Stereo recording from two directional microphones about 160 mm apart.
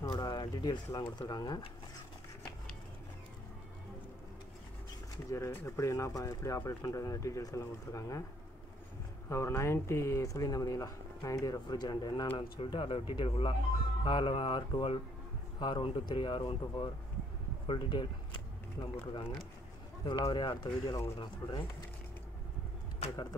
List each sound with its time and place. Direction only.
0.1 s speech: 30° left (ahead or behind)
5.3 s speech: 15° left (ahead or behind)
9.3 s speech: 20° left (ahead or behind)
17.6 s a sound: 30° left (ahead or behind)
20.1 s speech: 25° left (ahead or behind)